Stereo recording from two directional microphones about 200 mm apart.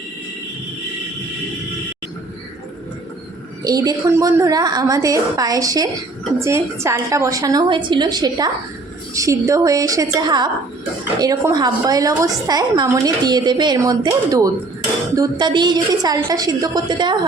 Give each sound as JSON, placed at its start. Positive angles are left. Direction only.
{"t": 3.6, "sound": "a woman's voice", "side_deg": -20}